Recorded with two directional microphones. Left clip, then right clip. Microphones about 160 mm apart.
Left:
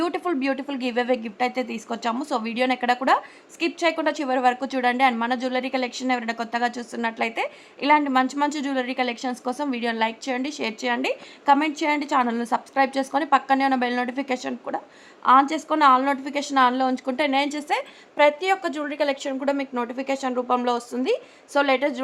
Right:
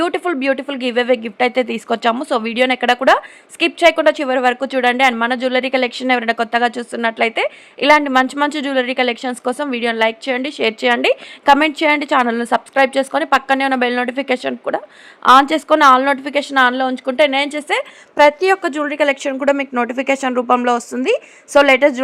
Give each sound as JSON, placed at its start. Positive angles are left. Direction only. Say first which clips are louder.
{"t": 0.0, "sound": "speech", "louder": "right 7 dB", "side_deg": -25}
{"t": 15.2, "sound": "speech", "louder": "right 7 dB", "side_deg": -40}
{"t": 18.2, "sound": "a woman's voice", "louder": "right 8 dB", "side_deg": -40}